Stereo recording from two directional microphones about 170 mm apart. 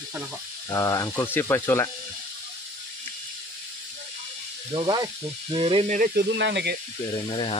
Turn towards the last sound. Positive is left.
turn(degrees=35)  # may be behind; listen again after turning